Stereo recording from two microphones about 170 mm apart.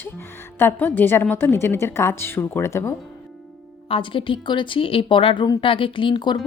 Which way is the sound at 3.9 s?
30° left (ahead or behind).